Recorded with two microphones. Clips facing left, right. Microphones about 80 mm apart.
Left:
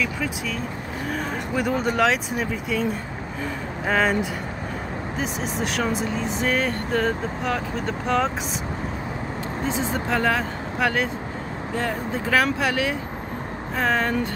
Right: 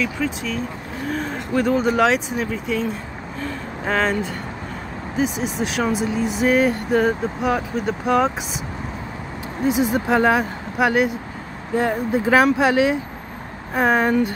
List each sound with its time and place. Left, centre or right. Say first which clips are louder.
0.0 s speech: right 3 dB; centre
9.7 s speech: right 7 dB; centre